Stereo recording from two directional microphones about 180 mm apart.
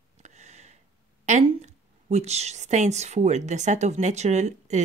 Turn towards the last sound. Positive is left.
turn(degrees=-40)  # may be behind; listen again after turning